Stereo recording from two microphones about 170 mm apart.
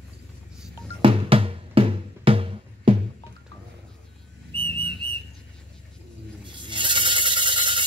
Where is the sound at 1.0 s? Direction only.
35° right (ahead or behind).